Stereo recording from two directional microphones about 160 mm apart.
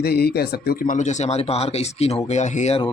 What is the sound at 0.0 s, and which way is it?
Speech, 80° left.